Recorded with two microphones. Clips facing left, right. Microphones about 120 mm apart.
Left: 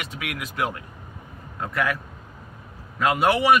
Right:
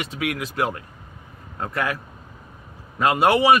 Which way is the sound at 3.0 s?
30° right (ahead or behind).